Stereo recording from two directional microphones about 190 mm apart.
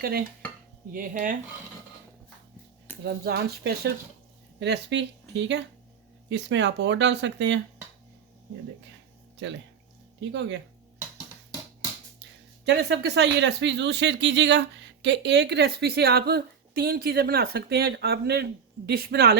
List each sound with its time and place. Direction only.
0.0 s a woman's voice: 50° right (ahead or behind)
3.0 s speech: 55° right (ahead or behind)
9.4 s speech: 70° right (ahead or behind)
12.6 s a woman's voice: 65° right (ahead or behind)